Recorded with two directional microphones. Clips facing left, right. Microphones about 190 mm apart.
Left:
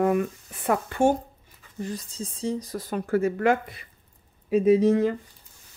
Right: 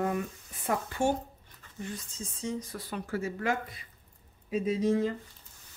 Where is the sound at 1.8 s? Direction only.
35° left (ahead or behind); by 5.2 s 65° left (ahead or behind).